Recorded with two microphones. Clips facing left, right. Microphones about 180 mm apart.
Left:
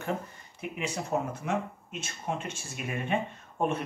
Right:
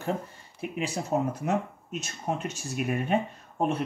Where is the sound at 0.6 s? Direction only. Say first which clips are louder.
Right 3 dB; 30° right (ahead or behind).